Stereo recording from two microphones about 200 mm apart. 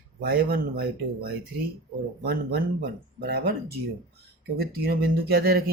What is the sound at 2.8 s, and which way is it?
Speech, 50° right (ahead or behind).